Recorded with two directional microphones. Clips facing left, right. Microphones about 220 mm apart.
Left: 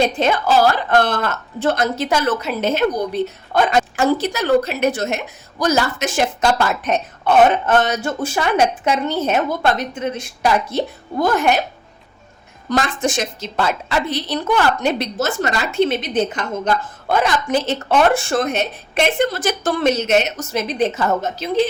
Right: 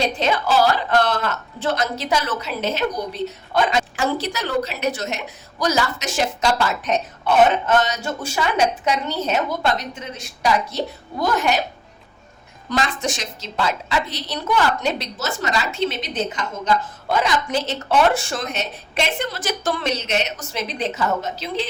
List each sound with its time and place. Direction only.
0.2 s a woman's voice: 50° left (ahead or behind)
12.7 s a woman's voice: 50° left (ahead or behind)